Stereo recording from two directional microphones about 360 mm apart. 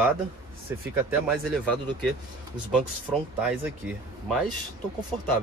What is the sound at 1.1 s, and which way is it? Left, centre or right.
Speech, centre.